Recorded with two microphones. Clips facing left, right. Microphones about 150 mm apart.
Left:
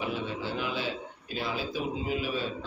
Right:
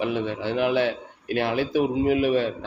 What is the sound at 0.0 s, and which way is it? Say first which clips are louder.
A man's voice: right 7 dB; 65° right (ahead or behind).